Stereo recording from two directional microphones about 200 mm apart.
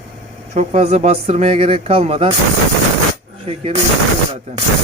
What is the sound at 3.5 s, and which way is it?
Speech, 30° right (ahead or behind).